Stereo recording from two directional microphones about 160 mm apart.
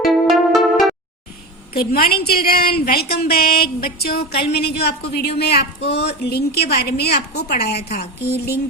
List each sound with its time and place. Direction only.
0.0 s music: centre (ahead or behind)
1.7 s a woman's voice: 75° left (ahead or behind)
4.6 s speech: 90° left